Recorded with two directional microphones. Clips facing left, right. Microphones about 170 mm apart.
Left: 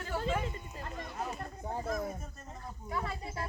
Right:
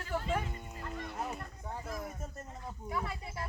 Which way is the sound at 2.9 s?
5° right (ahead or behind).